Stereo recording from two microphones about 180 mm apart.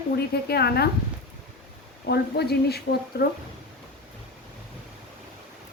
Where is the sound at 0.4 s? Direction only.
60° left (ahead or behind).